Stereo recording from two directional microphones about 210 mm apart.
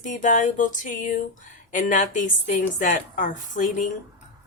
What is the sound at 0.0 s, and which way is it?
Speech, 35° left (ahead or behind).